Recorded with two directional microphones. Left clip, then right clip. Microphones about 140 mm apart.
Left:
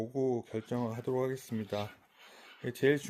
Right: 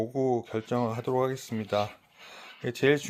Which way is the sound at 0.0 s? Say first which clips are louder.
Right 5 dB; 40° left (ahead or behind).